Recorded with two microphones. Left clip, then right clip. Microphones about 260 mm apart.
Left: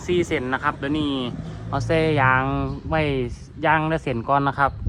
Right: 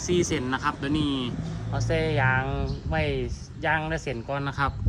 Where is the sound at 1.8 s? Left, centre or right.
Centre.